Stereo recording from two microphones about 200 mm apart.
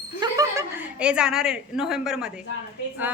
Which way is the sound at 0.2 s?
15° right (ahead or behind).